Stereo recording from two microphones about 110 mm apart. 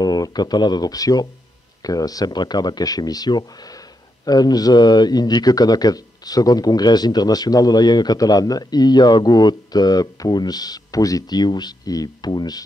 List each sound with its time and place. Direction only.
0.0 s speech: 35° left (ahead or behind)